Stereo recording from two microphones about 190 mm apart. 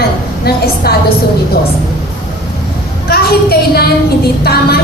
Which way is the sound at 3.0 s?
55° left (ahead or behind).